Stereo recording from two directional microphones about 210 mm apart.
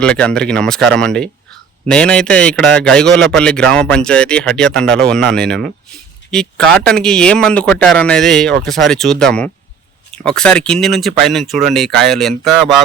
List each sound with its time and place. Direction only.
0.0 s a man's voice: 5° left (ahead or behind)